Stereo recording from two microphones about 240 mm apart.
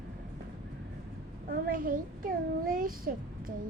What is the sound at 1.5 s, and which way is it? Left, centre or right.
A child's voice, right.